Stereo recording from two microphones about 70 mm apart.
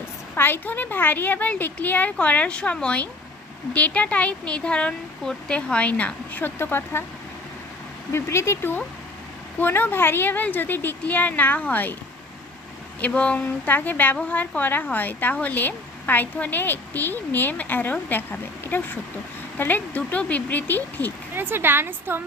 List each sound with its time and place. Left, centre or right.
0.3 s speech: left
8.1 s speech: left
13.0 s speech: centre
21.3 s a woman's voice: right